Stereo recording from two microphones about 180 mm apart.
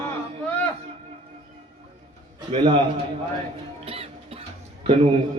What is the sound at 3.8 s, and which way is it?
Music, 35° right (ahead or behind).